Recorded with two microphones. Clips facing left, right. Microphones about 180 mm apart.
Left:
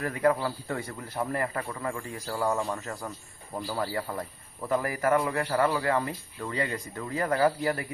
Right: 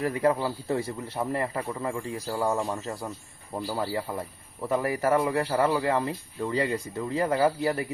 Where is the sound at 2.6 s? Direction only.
25° right (ahead or behind).